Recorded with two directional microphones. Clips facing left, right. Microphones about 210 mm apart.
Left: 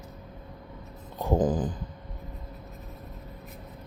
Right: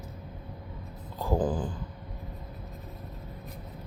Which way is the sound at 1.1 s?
20° left (ahead or behind).